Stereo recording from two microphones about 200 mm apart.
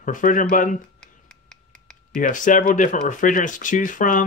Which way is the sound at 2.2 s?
40° left (ahead or behind).